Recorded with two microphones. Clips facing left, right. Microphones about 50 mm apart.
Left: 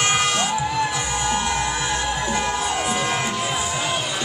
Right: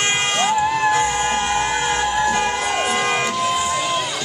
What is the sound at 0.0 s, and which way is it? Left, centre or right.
Music, right.